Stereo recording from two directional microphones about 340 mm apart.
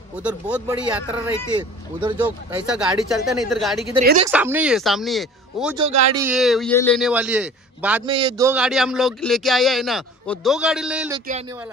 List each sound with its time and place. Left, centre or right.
0.2 s speech: centre
2.6 s speech: centre
4.0 s speech: right
4.3 s speech: centre
5.8 s speech: centre
6.2 s speech: centre
8.1 s speech: centre